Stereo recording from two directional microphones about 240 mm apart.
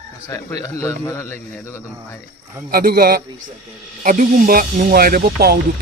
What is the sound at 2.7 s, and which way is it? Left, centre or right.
Speech, right.